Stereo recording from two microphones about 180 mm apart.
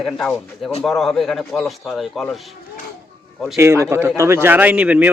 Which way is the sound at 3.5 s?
15° right (ahead or behind).